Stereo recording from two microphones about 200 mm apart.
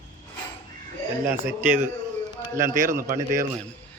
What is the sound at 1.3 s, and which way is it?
Speech, 10° right (ahead or behind).